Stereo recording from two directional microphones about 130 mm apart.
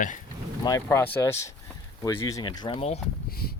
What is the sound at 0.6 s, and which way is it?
Speech, 25° left (ahead or behind).